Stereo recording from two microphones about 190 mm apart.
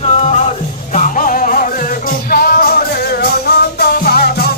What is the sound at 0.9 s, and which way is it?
Music, 45° left (ahead or behind).